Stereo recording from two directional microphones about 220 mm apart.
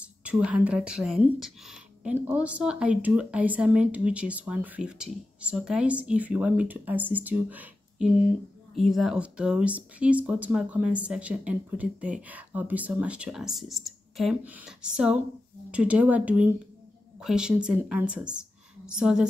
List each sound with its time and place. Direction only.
0.0 s speech: 5° right (ahead or behind)